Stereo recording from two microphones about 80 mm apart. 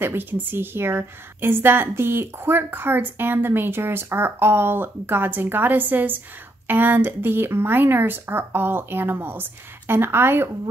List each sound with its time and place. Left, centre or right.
0.0 s a woman's voice: right